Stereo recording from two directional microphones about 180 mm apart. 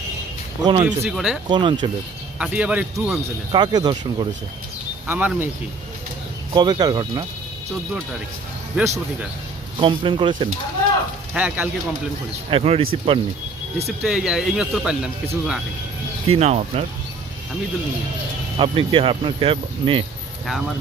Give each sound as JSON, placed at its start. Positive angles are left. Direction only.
{"t": 0.6, "sound": "speech", "side_deg": -25}
{"t": 0.9, "sound": "speech", "side_deg": -5}
{"t": 1.5, "sound": "speech", "side_deg": -25}
{"t": 2.4, "sound": "speech", "side_deg": -5}
{"t": 3.5, "sound": "speech", "side_deg": -25}
{"t": 5.0, "sound": "speech", "side_deg": -10}
{"t": 6.5, "sound": "speech", "side_deg": -20}
{"t": 8.8, "sound": "speech", "side_deg": -10}
{"t": 9.7, "sound": "speech", "side_deg": -30}
{"t": 11.3, "sound": "speech", "side_deg": -10}
{"t": 12.5, "sound": "speech", "side_deg": -35}
{"t": 13.8, "sound": "speech", "side_deg": -5}
{"t": 16.3, "sound": "speech", "side_deg": -35}
{"t": 18.5, "sound": "speech", "side_deg": -30}